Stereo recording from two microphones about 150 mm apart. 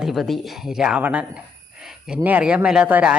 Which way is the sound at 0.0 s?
Centre (ahead or behind).